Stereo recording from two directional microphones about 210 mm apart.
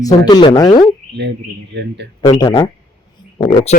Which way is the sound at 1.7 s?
55° right (ahead or behind).